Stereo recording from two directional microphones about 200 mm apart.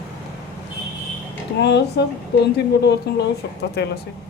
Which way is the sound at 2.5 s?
55° left (ahead or behind).